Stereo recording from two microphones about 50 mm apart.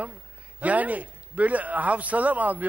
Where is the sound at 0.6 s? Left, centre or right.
Right.